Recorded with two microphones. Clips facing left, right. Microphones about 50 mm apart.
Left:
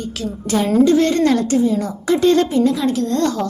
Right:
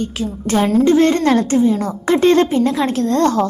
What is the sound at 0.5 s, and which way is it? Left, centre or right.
A woman's voice, right.